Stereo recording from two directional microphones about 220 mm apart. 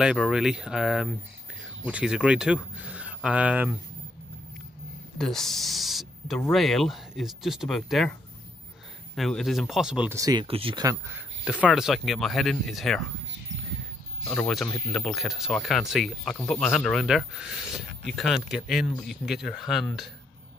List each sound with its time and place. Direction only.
0.0 s speech: 5° right (ahead or behind)
5.2 s speech: centre (ahead or behind)
9.1 s speech: centre (ahead or behind)
14.2 s speech: centre (ahead or behind)